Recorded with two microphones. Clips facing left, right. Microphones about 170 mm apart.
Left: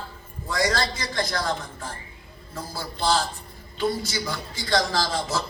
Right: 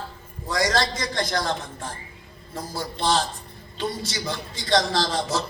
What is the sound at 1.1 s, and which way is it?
A woman's voice, 30° right (ahead or behind).